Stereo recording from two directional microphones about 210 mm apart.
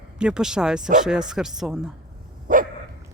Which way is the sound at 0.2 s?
5° right (ahead or behind).